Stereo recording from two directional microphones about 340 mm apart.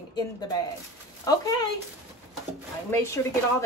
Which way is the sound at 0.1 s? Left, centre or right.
Centre.